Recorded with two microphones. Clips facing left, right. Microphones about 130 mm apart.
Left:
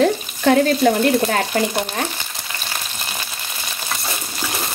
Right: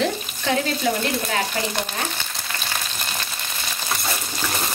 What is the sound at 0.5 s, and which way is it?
Speech, 55° left (ahead or behind).